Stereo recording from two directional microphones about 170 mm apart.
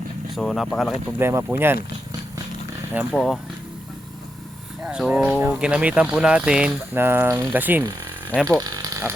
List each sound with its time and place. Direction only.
0.3 s speech: centre (ahead or behind)
1.2 s speech: 15° right (ahead or behind)
2.9 s speech: 5° right (ahead or behind)
4.8 s speech: 5° right (ahead or behind)
8.6 s a sound: 20° right (ahead or behind)